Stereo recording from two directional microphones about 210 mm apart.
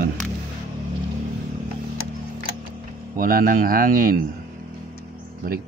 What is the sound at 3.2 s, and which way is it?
Speech, 45° right (ahead or behind).